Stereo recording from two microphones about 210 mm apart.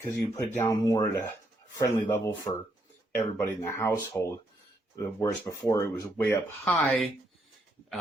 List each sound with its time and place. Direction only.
0.0 s speech: 10° left (ahead or behind)